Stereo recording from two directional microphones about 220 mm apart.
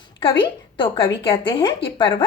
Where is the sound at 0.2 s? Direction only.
20° left (ahead or behind).